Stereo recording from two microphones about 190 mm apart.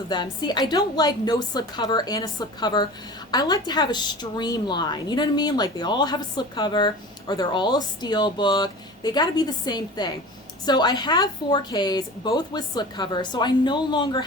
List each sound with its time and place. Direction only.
0.1 s speech: 20° left (ahead or behind)